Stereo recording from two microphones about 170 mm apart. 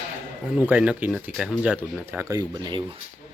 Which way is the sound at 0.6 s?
10° right (ahead or behind).